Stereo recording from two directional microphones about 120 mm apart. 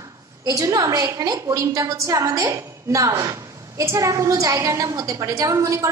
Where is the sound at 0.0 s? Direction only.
30° right (ahead or behind).